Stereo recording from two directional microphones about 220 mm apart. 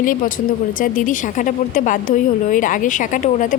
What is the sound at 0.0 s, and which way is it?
A woman's voice, 40° left (ahead or behind).